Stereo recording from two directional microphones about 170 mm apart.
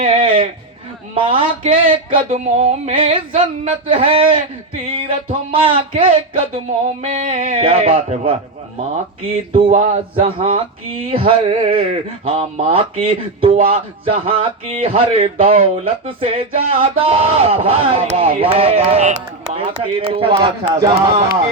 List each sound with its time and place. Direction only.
0.0 s speech: 35° right (ahead or behind)
7.0 s a sound: 50° right (ahead or behind)
7.3 s speech: 35° right (ahead or behind)
9.5 s speech: 35° right (ahead or behind)
20.7 s a sound: 20° right (ahead or behind)
20.9 s speech: 35° right (ahead or behind)